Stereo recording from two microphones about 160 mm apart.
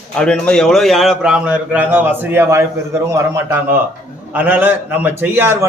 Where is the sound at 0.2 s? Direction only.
5° left (ahead or behind).